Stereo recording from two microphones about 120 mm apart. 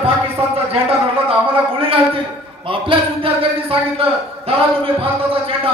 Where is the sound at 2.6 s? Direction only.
50° right (ahead or behind).